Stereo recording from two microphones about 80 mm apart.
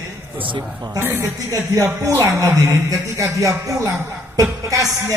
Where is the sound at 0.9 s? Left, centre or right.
Right.